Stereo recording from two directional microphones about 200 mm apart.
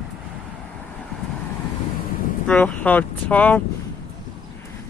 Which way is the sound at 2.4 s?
5° left (ahead or behind).